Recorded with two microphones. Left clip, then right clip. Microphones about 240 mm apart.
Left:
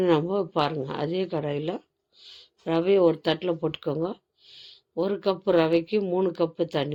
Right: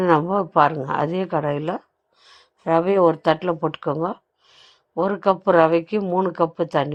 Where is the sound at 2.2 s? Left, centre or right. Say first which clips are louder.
Left 3 dB; right.